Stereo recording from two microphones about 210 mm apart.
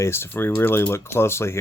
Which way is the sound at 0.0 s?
10° left (ahead or behind).